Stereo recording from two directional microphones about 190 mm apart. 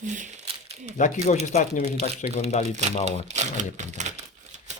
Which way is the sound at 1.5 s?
40° left (ahead or behind).